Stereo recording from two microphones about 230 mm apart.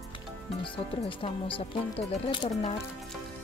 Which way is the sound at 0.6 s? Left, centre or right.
Left.